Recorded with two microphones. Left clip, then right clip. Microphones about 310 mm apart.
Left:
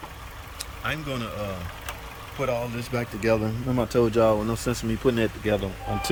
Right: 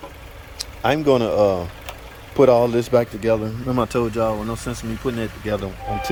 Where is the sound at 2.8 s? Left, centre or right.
Centre.